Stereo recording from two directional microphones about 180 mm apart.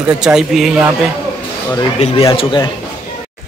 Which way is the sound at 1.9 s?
35° left (ahead or behind).